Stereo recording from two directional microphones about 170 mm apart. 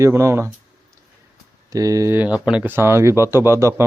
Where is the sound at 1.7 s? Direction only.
20° right (ahead or behind).